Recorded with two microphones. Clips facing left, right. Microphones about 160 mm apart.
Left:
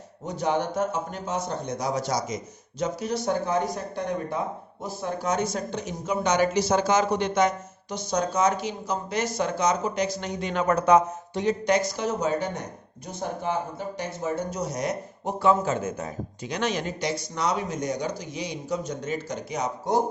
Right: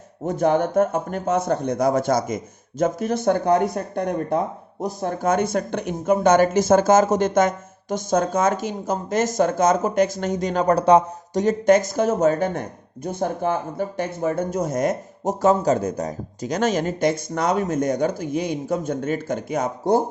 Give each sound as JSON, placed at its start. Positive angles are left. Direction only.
{"t": 0.3, "sound": "speech", "side_deg": -50}
{"t": 11.4, "sound": "speech", "side_deg": -45}